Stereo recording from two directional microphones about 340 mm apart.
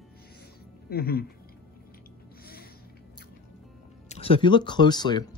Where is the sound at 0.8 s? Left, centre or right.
Left.